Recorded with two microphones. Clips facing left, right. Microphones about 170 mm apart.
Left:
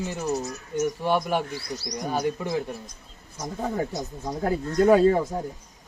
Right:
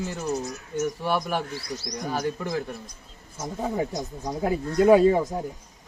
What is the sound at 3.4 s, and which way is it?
Speech, 10° right (ahead or behind).